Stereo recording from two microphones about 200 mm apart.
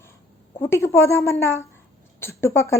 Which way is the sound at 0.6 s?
15° left (ahead or behind).